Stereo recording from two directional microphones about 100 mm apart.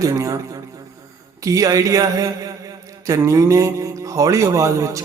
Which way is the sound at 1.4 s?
35° right (ahead or behind).